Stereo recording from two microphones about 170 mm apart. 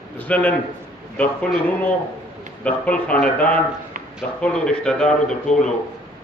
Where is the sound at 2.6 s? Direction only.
5° left (ahead or behind).